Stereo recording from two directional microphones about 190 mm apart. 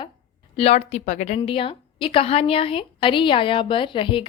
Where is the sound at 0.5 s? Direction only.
30° left (ahead or behind).